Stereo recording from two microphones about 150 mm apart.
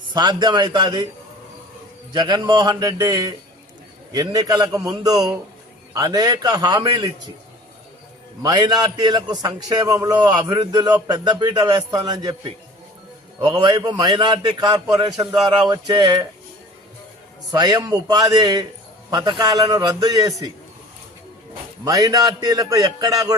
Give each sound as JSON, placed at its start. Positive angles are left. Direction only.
{"t": 0.1, "sound": "a man's voice", "side_deg": -30}
{"t": 2.1, "sound": "a man's voice", "side_deg": -30}
{"t": 8.4, "sound": "a man's voice", "side_deg": -25}
{"t": 17.5, "sound": "a man's voice", "side_deg": -25}
{"t": 21.8, "sound": "a man's voice", "side_deg": -25}